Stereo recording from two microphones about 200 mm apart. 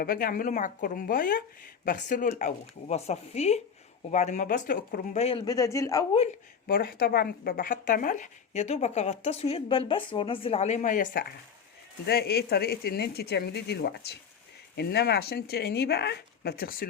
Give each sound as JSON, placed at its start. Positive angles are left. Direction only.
{"t": 0.0, "sound": "speech", "side_deg": 45}
{"t": 5.5, "sound": "speech", "side_deg": 15}
{"t": 6.7, "sound": "speech", "side_deg": 50}